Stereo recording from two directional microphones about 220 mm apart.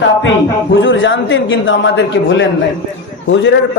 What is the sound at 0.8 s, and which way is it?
Speech, 60° left (ahead or behind).